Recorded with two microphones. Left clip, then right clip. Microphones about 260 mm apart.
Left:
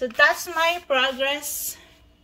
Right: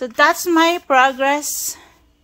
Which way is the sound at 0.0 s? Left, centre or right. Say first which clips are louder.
Right 4 dB; right.